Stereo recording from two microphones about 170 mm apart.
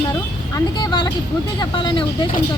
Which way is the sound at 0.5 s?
25° left (ahead or behind).